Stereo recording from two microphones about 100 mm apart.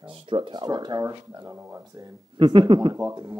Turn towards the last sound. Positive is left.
turn(degrees=-40)  # may be behind; listen again after turning